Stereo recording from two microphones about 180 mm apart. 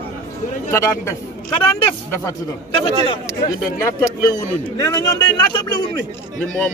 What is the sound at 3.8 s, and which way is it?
A man's voice, 20° left (ahead or behind).